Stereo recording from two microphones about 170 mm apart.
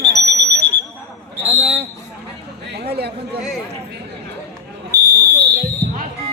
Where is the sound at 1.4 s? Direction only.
35° right (ahead or behind).